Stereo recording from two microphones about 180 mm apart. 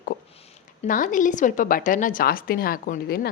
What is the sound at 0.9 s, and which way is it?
A woman's voice, 50° left (ahead or behind).